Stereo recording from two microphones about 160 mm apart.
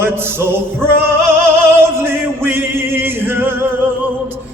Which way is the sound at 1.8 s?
15° right (ahead or behind).